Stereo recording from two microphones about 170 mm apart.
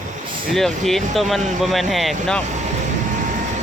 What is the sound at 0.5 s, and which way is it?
Speech, centre (ahead or behind).